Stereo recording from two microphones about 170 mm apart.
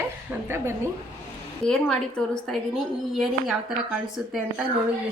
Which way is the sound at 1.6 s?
5° left (ahead or behind).